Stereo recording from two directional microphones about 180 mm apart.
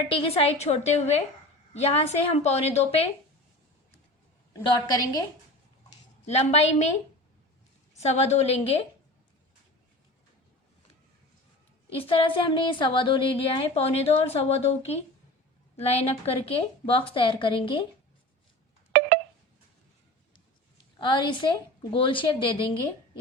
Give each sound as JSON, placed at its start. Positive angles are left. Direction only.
{"t": 0.0, "sound": "a woman's voice", "side_deg": 30}
{"t": 4.5, "sound": "a woman's voice", "side_deg": 20}
{"t": 6.2, "sound": "a woman's voice", "side_deg": 40}
{"t": 7.9, "sound": "a woman's voice", "side_deg": 40}
{"t": 11.9, "sound": "a woman's voice", "side_deg": 30}
{"t": 15.8, "sound": "a woman's voice", "side_deg": 35}
{"t": 18.9, "sound": "telephone dialing", "side_deg": -55}
{"t": 21.0, "sound": "a woman's voice", "side_deg": 25}